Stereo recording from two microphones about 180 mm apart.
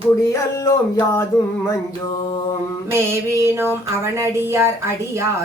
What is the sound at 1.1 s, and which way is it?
Music, 15° left (ahead or behind).